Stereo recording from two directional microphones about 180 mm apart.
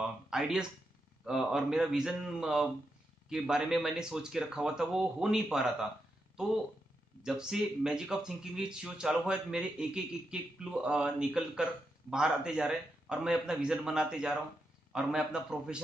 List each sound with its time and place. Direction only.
0.0 s a sound: 5° right (ahead or behind)
1.2 s speech: 5° right (ahead or behind)
7.2 s speech: 5° right (ahead or behind)